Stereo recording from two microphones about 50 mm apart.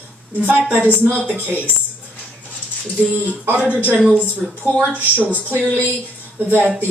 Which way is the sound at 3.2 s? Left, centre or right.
Right.